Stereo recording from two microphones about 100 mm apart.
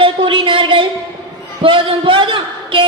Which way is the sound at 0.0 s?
60° right (ahead or behind).